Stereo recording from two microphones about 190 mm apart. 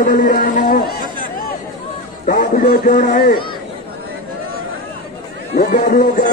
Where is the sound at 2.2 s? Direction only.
45° left (ahead or behind).